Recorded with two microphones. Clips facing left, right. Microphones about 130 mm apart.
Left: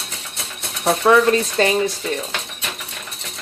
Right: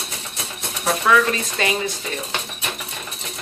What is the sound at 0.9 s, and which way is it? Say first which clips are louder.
Speech: left 4 dB; 30° left (ahead or behind).